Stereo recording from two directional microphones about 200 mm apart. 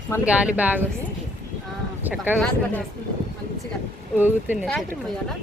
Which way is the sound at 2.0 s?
10° right (ahead or behind).